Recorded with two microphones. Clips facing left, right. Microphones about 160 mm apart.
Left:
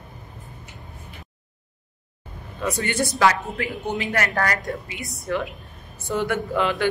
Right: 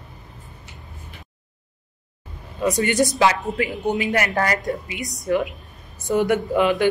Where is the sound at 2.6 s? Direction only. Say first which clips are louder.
Right 5 dB; 15° right (ahead or behind).